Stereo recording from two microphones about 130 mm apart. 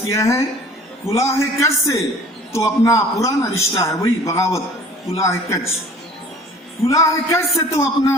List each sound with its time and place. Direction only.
0.1 s a man's voice: 25° left (ahead or behind)
6.8 s a man's voice: 25° left (ahead or behind)